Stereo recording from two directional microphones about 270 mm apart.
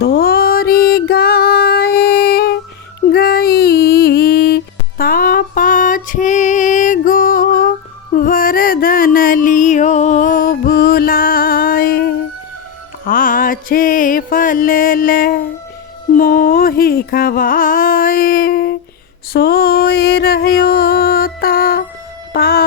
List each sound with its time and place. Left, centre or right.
0.0 s music: left
8.1 s a sound: left
13.1 s music: left
16.1 s carnatic music: left
19.3 s a sound: left
22.3 s music: left